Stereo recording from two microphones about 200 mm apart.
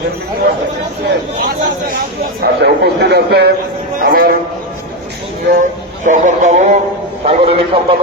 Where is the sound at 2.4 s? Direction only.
55° right (ahead or behind).